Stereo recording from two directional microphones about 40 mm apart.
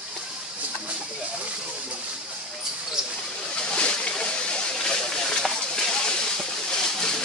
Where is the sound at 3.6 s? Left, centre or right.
Left.